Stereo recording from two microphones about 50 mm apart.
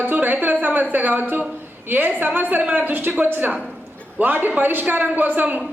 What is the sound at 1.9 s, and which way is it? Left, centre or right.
Speech, right.